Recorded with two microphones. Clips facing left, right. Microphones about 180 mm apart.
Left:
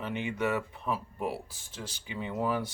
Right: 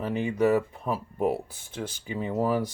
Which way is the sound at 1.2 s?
50° right (ahead or behind).